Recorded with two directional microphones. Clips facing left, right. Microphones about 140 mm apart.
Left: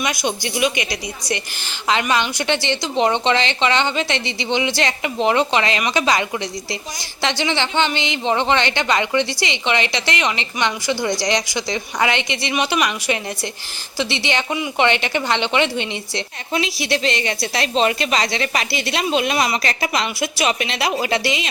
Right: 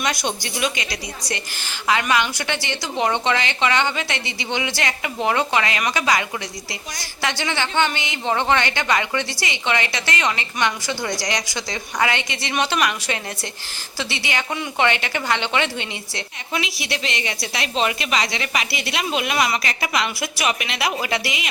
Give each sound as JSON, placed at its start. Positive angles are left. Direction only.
{"t": 0.0, "sound": "a woman's voice", "side_deg": 10}